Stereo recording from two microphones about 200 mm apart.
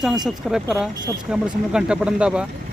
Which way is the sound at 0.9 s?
20° right (ahead or behind).